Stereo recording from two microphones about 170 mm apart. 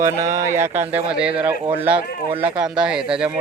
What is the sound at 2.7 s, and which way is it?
Speech, 5° right (ahead or behind).